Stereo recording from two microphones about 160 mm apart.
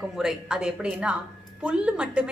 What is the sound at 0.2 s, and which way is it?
A woman's voice, 5° right (ahead or behind).